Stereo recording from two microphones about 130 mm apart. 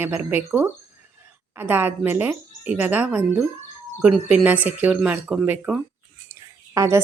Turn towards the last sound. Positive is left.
turn(degrees=-20)  # may be behind; listen again after turning